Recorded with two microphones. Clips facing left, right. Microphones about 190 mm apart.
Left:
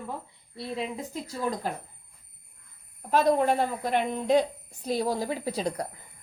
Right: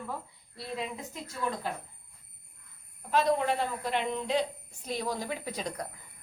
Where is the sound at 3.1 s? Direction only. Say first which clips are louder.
Left 4 dB; 45° left (ahead or behind).